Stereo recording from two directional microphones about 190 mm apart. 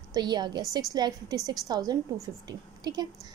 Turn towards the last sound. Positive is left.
turn(degrees=-20)  # may be behind; listen again after turning